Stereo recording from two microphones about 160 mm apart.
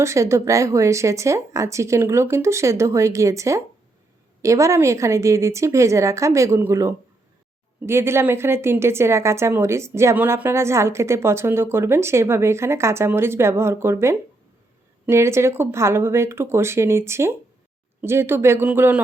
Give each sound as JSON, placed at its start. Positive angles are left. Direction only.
{"t": 0.0, "sound": "a woman's voice", "side_deg": -20}